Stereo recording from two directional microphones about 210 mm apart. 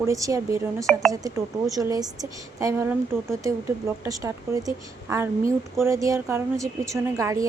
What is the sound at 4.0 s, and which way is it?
Speech, 15° right (ahead or behind).